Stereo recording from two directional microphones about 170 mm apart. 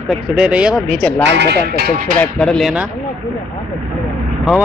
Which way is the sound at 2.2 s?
5° left (ahead or behind).